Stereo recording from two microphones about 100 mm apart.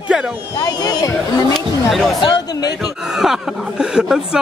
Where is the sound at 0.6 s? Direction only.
45° left (ahead or behind).